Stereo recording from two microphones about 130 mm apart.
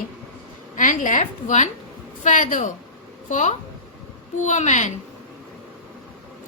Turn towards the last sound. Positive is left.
turn(degrees=65)  # may be behind; listen again after turning